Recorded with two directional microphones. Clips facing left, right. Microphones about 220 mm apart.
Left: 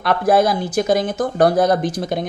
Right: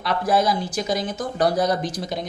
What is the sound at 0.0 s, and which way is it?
Speech, 55° left (ahead or behind).